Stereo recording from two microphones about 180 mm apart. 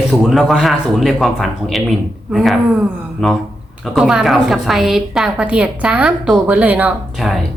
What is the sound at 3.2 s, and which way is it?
A woman's voice, centre (ahead or behind).